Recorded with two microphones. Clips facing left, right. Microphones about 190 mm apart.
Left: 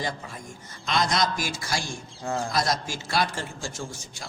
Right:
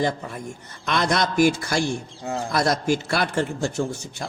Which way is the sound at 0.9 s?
60° right (ahead or behind).